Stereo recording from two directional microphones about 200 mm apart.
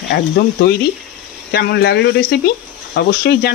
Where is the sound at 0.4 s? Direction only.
55° left (ahead or behind).